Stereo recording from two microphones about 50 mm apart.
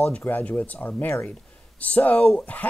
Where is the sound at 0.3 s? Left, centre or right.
Left.